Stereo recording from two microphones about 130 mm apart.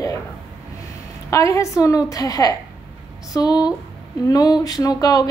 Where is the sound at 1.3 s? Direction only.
25° left (ahead or behind).